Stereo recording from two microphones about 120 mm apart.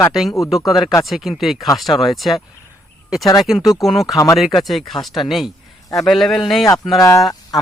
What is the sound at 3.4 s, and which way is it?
Speech, centre (ahead or behind).